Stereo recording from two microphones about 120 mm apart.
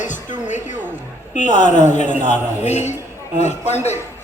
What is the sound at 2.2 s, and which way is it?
A man's voice, 75° left (ahead or behind).